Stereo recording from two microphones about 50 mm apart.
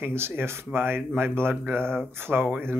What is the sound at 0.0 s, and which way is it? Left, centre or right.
Speech, right.